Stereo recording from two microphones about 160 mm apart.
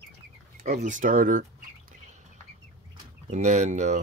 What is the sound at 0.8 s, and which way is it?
Speech, 55° right (ahead or behind).